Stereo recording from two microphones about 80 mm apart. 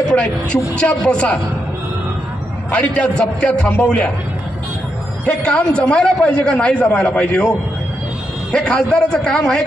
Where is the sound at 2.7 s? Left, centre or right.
Centre.